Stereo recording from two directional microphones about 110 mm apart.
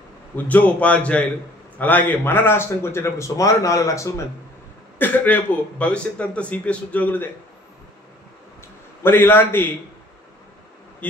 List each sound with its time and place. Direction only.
0.4 s speech: 15° left (ahead or behind)
4.9 s speech: 15° left (ahead or behind)
9.0 s speech: 20° left (ahead or behind)